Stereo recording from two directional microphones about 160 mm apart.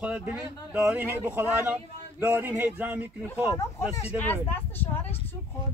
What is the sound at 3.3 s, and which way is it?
Speech, 15° left (ahead or behind).